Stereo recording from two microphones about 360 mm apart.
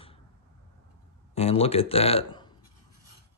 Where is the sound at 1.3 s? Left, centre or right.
Centre.